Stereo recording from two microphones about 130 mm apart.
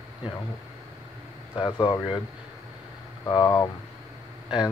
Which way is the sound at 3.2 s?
30° left (ahead or behind).